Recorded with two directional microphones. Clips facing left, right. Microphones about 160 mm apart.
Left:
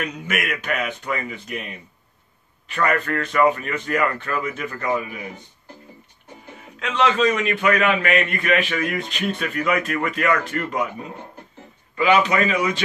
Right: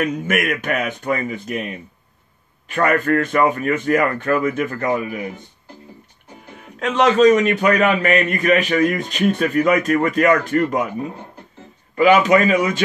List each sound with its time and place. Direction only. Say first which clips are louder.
0.0 s speech: right 7 dB; 50° right (ahead or behind)
2.7 s speech: right 5 dB; 45° right (ahead or behind)
6.8 s a man's voice: right 6 dB; 45° right (ahead or behind)
11.9 s speech: right 5 dB; 45° right (ahead or behind)